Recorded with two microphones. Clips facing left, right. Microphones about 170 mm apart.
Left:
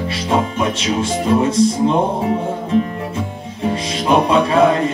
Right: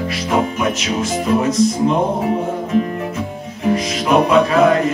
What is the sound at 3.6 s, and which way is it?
Music, 30° left (ahead or behind).